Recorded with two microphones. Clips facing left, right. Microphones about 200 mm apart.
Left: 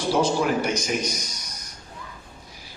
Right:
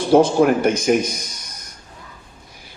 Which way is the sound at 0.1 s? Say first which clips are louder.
Right 9 dB; 55° right (ahead or behind).